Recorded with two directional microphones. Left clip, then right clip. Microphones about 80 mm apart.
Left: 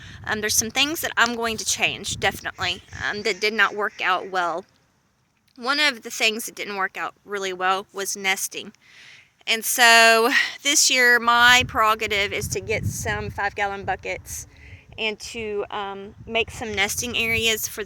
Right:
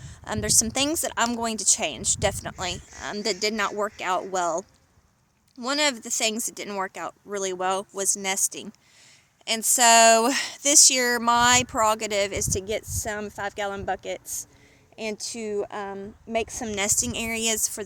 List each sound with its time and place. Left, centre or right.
0.0 s speech: right